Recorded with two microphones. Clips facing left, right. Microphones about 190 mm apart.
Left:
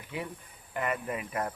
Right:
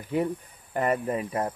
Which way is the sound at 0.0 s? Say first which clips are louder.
Right 11 dB; 45° right (ahead or behind).